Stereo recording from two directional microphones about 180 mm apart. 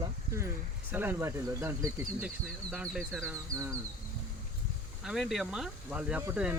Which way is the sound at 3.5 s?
15° right (ahead or behind).